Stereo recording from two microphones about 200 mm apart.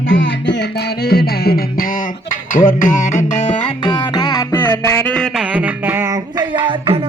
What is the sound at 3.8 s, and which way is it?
Music, 20° left (ahead or behind).